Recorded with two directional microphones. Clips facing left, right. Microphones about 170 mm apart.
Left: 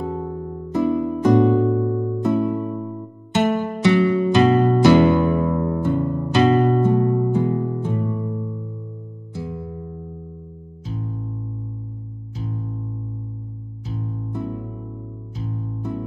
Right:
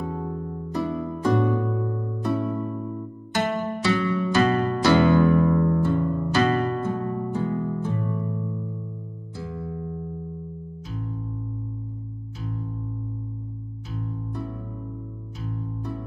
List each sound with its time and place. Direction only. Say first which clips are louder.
0.0 s music: left 4 dB; 25° left (ahead or behind)
9.3 s music: left 3 dB; 15° left (ahead or behind)
14.3 s music: left 8 dB; 25° left (ahead or behind)